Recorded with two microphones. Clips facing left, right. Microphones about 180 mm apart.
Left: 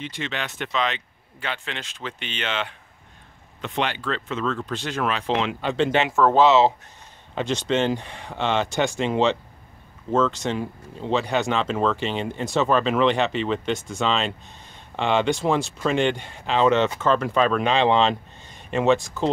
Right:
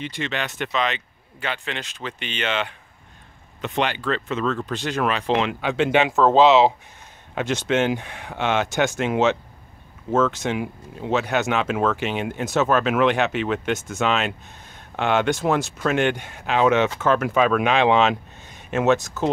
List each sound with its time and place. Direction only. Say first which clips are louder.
0.0 s speech: right 3 dB; centre (ahead or behind)